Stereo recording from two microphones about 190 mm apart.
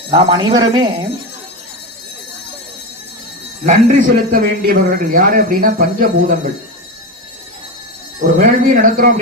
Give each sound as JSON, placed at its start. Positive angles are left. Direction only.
{"t": 0.1, "sound": "speech", "side_deg": -25}
{"t": 3.7, "sound": "a man's voice", "side_deg": -40}
{"t": 8.4, "sound": "a man's voice", "side_deg": -45}